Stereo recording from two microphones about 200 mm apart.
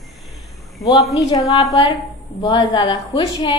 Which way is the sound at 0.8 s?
15° left (ahead or behind).